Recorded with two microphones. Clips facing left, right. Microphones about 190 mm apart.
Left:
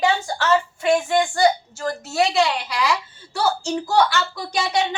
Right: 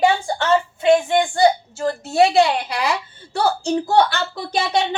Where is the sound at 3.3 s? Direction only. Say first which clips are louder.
Right 3 dB; 60° right (ahead or behind).